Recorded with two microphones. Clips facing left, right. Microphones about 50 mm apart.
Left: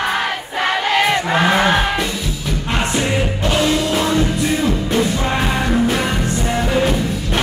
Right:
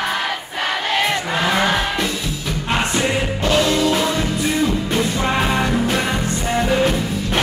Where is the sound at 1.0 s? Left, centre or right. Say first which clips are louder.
Left 4 dB; left.